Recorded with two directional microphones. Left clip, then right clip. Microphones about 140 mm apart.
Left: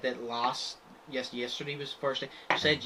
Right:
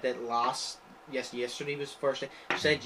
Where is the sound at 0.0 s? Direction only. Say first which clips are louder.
Right 2 dB; 15° left (ahead or behind).